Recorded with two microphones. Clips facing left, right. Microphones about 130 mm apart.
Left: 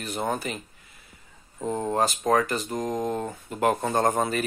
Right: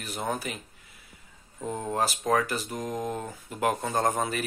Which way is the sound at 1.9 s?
Centre (ahead or behind).